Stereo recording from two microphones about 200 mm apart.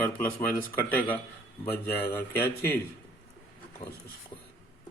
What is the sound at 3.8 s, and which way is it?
Speech, 25° left (ahead or behind).